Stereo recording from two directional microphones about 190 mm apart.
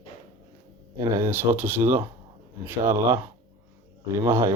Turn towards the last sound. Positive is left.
turn(degrees=-15)  # may be behind; listen again after turning